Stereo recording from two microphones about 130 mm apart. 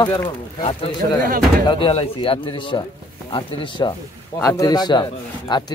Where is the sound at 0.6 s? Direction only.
50° left (ahead or behind).